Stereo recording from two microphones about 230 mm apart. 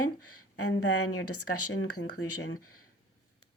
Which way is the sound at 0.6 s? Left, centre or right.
Left.